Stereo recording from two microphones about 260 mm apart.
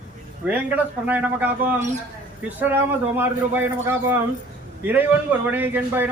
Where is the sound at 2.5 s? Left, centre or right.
Centre.